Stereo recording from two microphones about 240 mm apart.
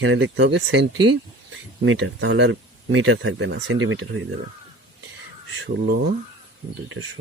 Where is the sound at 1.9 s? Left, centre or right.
Right.